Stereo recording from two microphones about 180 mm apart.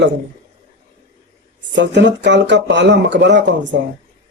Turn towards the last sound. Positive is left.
turn(degrees=-80)